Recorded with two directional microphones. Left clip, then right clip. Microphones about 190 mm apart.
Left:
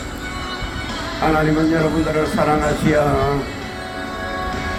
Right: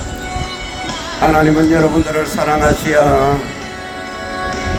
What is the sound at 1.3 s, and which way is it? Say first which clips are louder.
Speech: right 6 dB; 55° right (ahead or behind).